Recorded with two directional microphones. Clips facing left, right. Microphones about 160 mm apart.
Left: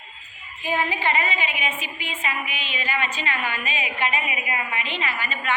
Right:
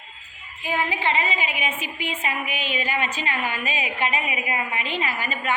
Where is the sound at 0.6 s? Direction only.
15° right (ahead or behind).